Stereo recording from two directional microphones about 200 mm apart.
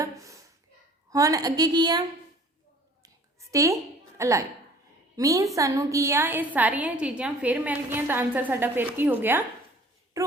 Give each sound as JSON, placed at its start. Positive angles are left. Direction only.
{"t": 0.0, "sound": "a sound", "side_deg": -15}
{"t": 1.1, "sound": "a woman's voice", "side_deg": -15}
{"t": 3.5, "sound": "a woman's voice", "side_deg": -15}